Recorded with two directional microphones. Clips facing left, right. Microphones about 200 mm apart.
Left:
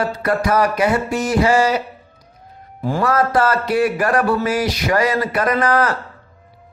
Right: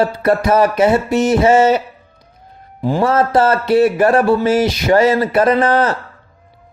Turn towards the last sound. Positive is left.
turn(degrees=-25)  # may be behind; listen again after turning